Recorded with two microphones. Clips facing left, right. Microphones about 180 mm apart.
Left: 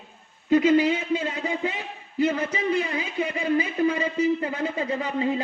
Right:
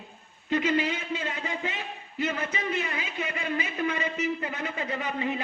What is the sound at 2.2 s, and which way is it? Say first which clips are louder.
A man's voice: left 7 dB; 35° left (ahead or behind).